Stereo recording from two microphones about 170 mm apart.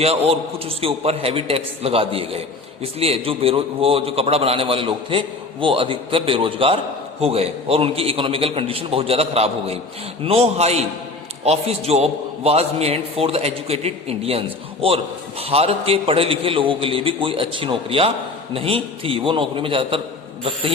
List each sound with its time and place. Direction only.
0.0 s a man's voice: 35° right (ahead or behind)